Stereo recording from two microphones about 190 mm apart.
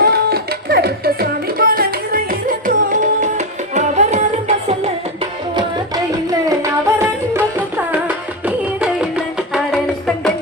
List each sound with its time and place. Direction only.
0.0 s music: 55° right (ahead or behind); by 4.9 s 35° right (ahead or behind)
6.5 s music: 15° right (ahead or behind)